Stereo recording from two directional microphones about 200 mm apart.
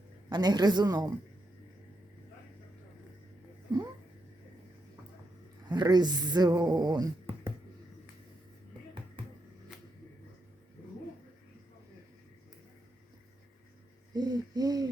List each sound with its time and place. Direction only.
0.3 s a woman's voice: 20° right (ahead or behind)
5.6 s speech: 20° right (ahead or behind)
14.1 s hoot: 20° right (ahead or behind)